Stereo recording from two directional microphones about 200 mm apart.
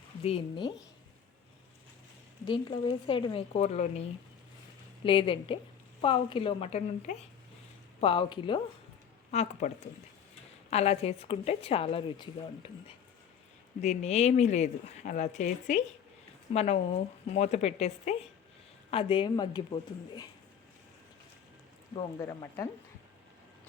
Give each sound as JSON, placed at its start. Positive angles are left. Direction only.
{"t": 0.2, "sound": "speech", "side_deg": 30}
{"t": 2.5, "sound": "speech", "side_deg": 25}
{"t": 5.0, "sound": "speech", "side_deg": 25}
{"t": 9.3, "sound": "speech", "side_deg": 35}
{"t": 13.8, "sound": "speech", "side_deg": 35}
{"t": 22.2, "sound": "speech", "side_deg": 15}